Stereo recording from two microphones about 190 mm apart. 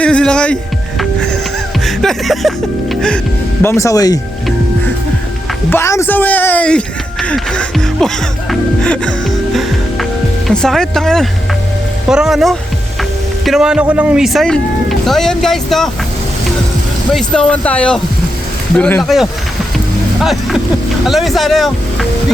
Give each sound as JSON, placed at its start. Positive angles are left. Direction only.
{"t": 0.0, "sound": "music", "side_deg": 5}
{"t": 1.8, "sound": "speech", "side_deg": 0}
{"t": 3.6, "sound": "speech", "side_deg": 15}
{"t": 5.7, "sound": "speech", "side_deg": 15}
{"t": 17.2, "sound": "speech", "side_deg": 5}
{"t": 21.1, "sound": "speech", "side_deg": 0}